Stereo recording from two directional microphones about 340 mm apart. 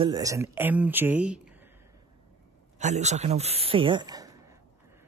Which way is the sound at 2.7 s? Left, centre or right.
Centre.